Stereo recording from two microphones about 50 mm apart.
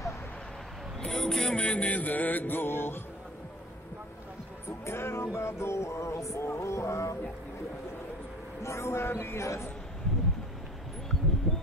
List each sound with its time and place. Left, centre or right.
1.0 s a sound: centre
1.6 s music: left
4.6 s music: left
8.6 s speech: left